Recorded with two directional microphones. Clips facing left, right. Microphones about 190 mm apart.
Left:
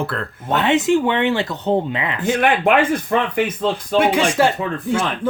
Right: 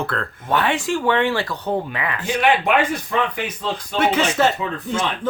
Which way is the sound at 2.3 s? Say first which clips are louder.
Left 2 dB; 50° left (ahead or behind).